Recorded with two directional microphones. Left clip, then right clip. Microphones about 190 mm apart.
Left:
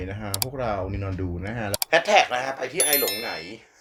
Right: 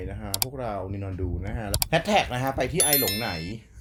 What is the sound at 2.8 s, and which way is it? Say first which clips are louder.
Speech: left 5 dB; centre (ahead or behind).